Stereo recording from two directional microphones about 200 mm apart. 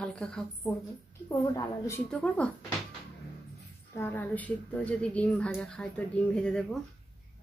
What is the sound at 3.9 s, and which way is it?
A woman's voice, 10° left (ahead or behind).